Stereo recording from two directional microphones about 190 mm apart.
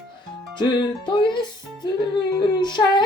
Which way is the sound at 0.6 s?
25° left (ahead or behind).